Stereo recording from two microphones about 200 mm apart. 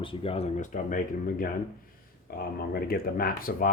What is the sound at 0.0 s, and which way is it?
Speech, 25° left (ahead or behind).